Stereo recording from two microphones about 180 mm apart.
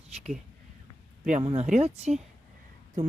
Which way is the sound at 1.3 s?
35° right (ahead or behind).